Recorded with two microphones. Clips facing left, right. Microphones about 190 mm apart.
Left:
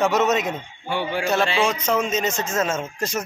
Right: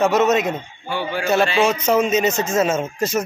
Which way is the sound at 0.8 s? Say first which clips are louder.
Even; 25° left (ahead or behind).